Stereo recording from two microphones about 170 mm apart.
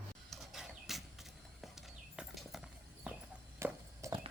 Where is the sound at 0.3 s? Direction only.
Centre (ahead or behind).